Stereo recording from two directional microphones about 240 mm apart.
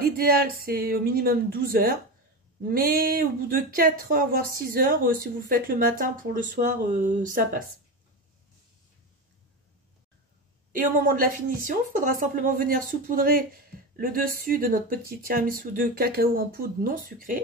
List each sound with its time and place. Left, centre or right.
0.0 s speech: right
10.7 s speech: right